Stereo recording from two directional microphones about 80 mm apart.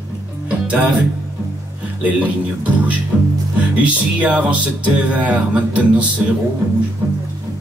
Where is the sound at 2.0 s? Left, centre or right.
Centre.